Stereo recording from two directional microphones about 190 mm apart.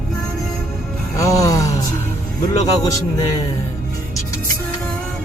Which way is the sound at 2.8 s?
20° left (ahead or behind).